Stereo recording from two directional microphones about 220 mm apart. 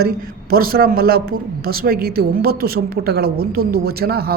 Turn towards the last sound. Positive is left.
turn(degrees=-45)  # may be behind; listen again after turning